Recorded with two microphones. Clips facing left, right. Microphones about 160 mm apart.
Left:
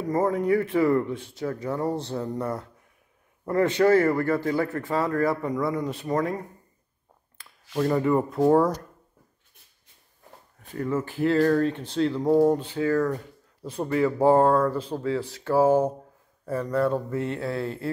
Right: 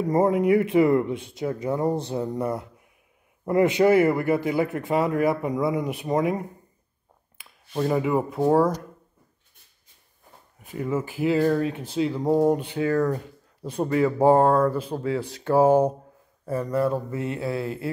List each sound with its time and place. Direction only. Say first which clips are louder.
0.1 s speech: right 3 dB; 20° right (ahead or behind)
7.4 s a sound: even; 10° right (ahead or behind)
7.7 s speech: left 1 dB; 10° right (ahead or behind)
10.6 s speech: even; 10° right (ahead or behind)